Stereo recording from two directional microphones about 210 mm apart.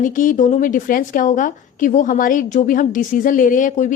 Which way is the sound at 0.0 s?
40° left (ahead or behind).